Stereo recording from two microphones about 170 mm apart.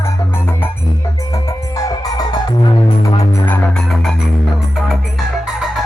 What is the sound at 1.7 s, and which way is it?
Music, 20° left (ahead or behind).